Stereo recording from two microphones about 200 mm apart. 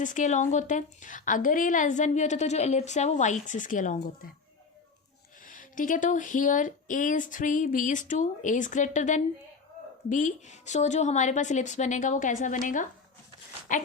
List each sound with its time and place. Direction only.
0.0 s a woman's voice: 40° left (ahead or behind)
5.5 s a woman's voice: 40° left (ahead or behind)